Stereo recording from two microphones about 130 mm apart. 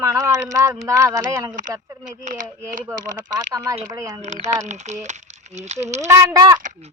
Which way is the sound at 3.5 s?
25° right (ahead or behind).